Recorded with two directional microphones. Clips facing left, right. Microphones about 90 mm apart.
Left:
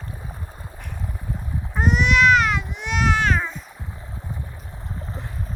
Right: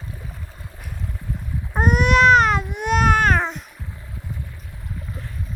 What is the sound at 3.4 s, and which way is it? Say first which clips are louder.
Music: right 4 dB; 75° right (ahead or behind).